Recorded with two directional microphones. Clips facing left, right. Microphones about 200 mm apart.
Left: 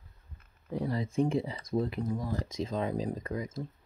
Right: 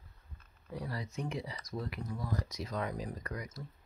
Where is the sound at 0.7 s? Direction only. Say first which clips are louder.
Left 10 dB; 25° left (ahead or behind).